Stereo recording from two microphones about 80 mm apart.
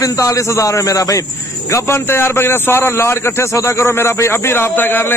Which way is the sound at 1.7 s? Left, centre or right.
Left.